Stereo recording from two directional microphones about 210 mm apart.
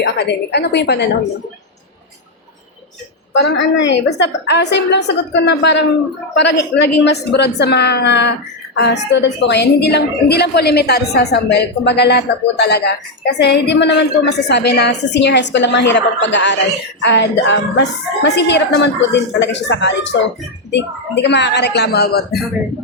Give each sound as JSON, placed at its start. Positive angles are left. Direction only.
{"t": 0.0, "sound": "a woman's voice", "side_deg": 55}
{"t": 3.3, "sound": "a woman's voice", "side_deg": 60}